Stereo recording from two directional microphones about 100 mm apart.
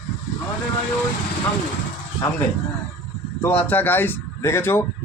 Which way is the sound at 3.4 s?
15° left (ahead or behind).